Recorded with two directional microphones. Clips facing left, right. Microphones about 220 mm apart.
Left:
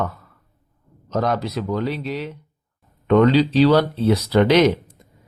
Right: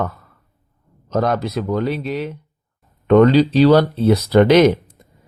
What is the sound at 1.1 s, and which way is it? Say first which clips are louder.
Speech: right 3 dB; 50° right (ahead or behind).